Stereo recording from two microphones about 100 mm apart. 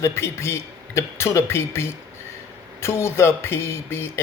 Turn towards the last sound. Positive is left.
turn(degrees=25)  # may be behind; listen again after turning